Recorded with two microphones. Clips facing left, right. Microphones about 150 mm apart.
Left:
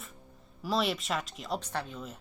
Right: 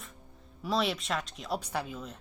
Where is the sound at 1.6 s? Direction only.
10° right (ahead or behind).